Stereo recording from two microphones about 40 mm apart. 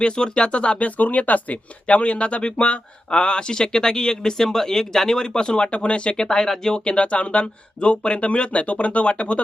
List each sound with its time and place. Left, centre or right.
0.0 s speech: left
0.8 s speech: left